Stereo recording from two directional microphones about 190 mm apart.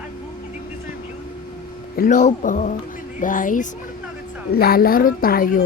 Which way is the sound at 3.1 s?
45° left (ahead or behind).